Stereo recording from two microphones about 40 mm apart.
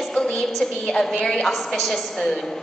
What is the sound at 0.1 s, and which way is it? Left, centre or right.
Music, centre.